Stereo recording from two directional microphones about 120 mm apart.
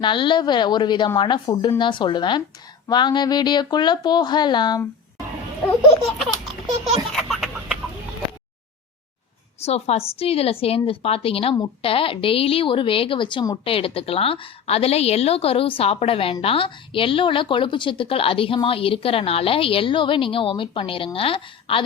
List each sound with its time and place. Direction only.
0.0 s a woman's voice: 40° left (ahead or behind)
6.1 s laughter: centre (ahead or behind)
7.1 s a sound: centre (ahead or behind)
9.6 s a woman's voice: 60° left (ahead or behind)